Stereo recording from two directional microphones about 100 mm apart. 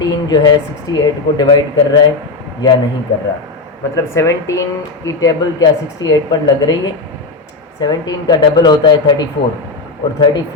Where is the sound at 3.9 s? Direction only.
30° left (ahead or behind); by 9.1 s 45° left (ahead or behind).